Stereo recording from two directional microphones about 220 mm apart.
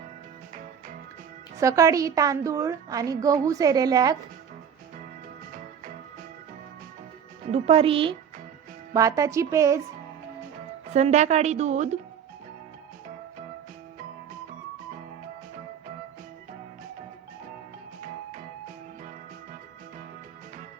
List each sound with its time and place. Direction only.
1.5 s a woman's voice: 15° right (ahead or behind)
7.4 s a woman's voice: 25° right (ahead or behind)
10.9 s a woman's voice: 30° right (ahead or behind)